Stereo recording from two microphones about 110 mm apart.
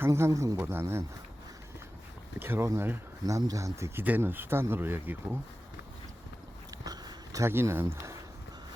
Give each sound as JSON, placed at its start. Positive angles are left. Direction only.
{"t": 0.0, "sound": "speech", "side_deg": -25}
{"t": 2.4, "sound": "speech", "side_deg": -20}
{"t": 6.8, "sound": "a sound", "side_deg": -35}
{"t": 7.4, "sound": "speech", "side_deg": -25}